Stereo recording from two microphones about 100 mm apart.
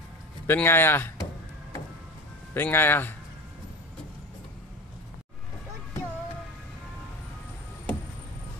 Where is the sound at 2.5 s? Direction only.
20° left (ahead or behind).